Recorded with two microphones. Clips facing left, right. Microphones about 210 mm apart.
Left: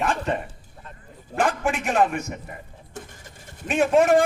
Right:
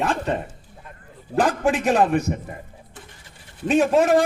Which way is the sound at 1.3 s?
35° right (ahead or behind).